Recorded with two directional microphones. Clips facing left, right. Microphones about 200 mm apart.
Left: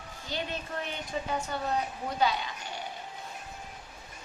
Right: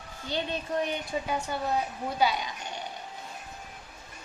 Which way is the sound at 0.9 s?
10° right (ahead or behind).